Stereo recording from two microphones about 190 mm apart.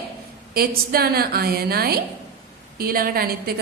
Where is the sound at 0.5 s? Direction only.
50° right (ahead or behind).